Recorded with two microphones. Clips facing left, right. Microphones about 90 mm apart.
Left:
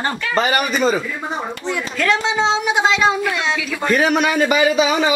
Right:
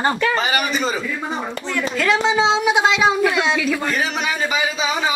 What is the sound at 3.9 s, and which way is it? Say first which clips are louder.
Speech: left 6 dB; 60° left (ahead or behind).